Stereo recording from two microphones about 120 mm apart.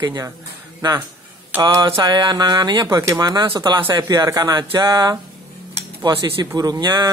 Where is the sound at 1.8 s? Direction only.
40° right (ahead or behind).